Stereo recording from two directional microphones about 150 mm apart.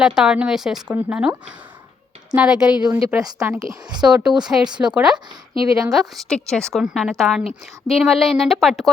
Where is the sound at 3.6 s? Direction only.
25° right (ahead or behind).